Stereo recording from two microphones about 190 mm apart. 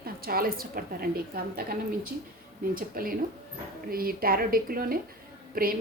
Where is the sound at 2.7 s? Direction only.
50° right (ahead or behind).